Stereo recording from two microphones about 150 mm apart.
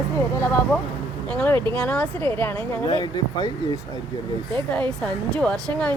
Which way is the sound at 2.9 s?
30° left (ahead or behind).